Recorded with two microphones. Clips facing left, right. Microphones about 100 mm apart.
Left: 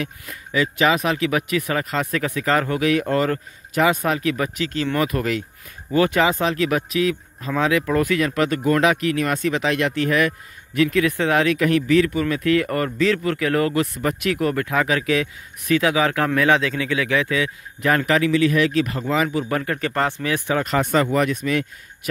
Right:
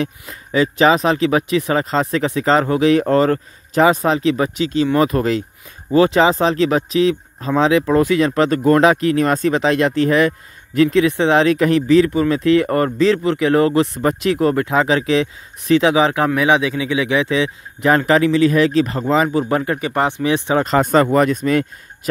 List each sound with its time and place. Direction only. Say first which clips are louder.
0.0 s speech: right 6 dB; 30° right (ahead or behind)